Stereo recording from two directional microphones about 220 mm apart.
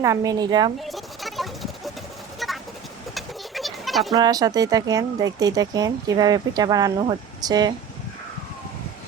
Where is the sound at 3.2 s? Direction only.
Centre (ahead or behind).